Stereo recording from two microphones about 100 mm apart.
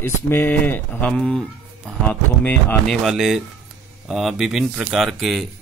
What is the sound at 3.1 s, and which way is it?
Speech, 5° right (ahead or behind).